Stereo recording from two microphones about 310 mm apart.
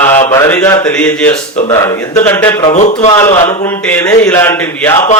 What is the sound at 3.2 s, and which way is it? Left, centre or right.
A man's voice, centre.